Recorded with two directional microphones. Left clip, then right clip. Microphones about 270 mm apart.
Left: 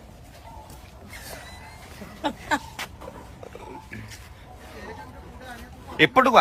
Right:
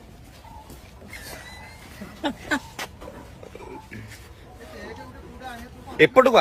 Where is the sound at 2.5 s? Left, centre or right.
Left.